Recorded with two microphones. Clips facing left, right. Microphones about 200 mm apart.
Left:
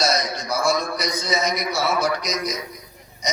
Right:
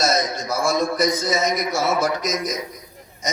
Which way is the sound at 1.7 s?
50° right (ahead or behind).